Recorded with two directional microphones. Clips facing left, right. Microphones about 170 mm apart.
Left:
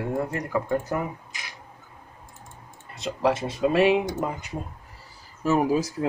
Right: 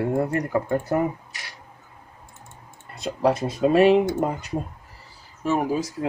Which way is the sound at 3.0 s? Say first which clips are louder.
Right 2 dB; 45° right (ahead or behind).